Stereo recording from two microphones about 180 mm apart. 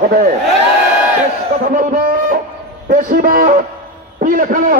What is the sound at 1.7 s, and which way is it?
A man's voice, 45° right (ahead or behind).